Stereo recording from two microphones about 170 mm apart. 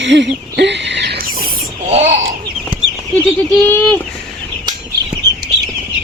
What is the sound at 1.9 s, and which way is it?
Speech, 40° right (ahead or behind).